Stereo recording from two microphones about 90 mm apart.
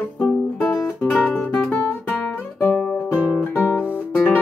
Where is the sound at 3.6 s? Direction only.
20° left (ahead or behind).